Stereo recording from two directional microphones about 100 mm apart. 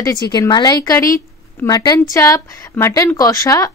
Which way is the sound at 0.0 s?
35° left (ahead or behind).